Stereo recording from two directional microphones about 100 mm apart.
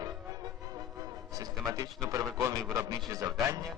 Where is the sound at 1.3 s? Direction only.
35° right (ahead or behind).